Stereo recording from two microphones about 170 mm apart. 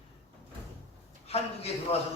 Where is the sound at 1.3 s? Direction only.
35° left (ahead or behind).